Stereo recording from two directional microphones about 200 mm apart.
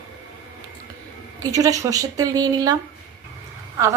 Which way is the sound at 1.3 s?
15° right (ahead or behind).